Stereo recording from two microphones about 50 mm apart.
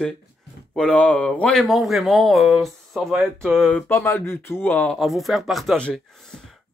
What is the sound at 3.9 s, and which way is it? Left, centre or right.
Speech, left.